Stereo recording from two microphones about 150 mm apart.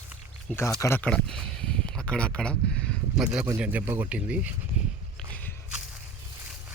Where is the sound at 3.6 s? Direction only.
10° right (ahead or behind).